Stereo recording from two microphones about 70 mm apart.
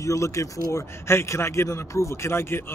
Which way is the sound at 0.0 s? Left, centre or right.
Left.